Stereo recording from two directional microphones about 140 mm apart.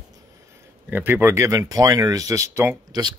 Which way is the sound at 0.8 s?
15° right (ahead or behind).